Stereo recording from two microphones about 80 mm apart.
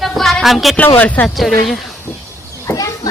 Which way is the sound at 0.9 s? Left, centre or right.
Left.